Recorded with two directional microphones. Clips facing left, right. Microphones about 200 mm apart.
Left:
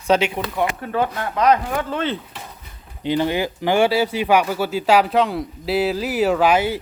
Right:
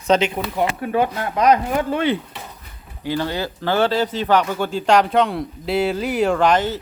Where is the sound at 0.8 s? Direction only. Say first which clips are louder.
Right 2 dB; 15° right (ahead or behind).